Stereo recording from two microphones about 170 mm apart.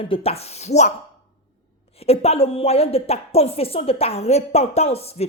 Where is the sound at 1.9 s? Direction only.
35° left (ahead or behind).